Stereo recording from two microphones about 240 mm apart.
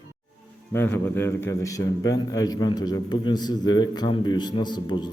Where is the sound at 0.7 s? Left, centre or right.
Centre.